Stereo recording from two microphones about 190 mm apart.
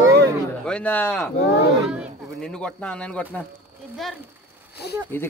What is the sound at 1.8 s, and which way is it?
Speech, 5° right (ahead or behind).